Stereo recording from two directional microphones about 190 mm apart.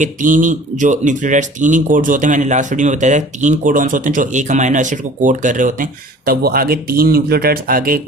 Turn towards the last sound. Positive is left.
turn(degrees=-50)  # may be behind; listen again after turning